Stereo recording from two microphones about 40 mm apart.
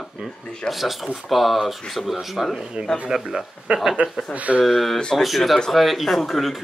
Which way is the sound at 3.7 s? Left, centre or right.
Right.